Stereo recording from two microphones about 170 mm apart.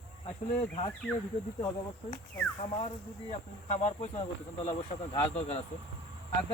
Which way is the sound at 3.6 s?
40° left (ahead or behind).